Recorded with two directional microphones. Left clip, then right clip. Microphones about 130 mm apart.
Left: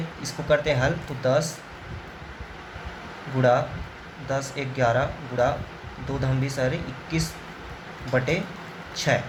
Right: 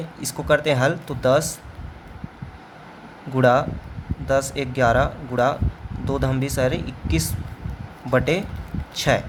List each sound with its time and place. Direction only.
0.2 s speech: 90° right
4.3 s speech: 75° right (ahead or behind)
6.1 s speech: 90° right